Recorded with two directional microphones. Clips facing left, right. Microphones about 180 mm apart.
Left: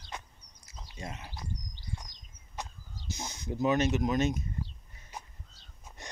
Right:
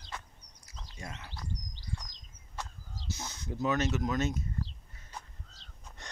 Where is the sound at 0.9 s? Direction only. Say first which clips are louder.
Left 3 dB; 20° left (ahead or behind).